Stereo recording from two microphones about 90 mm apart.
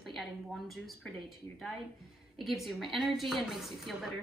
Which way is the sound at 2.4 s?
Centre (ahead or behind).